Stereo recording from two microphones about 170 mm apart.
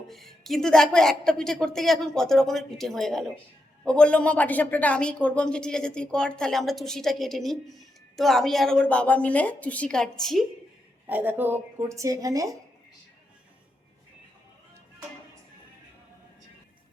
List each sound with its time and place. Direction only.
0.1 s speech: centre (ahead or behind)
11.0 s speech: 10° right (ahead or behind)